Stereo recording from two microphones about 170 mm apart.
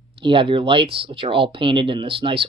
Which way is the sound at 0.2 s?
30° right (ahead or behind).